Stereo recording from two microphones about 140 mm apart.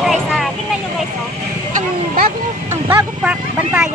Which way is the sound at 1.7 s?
90° right.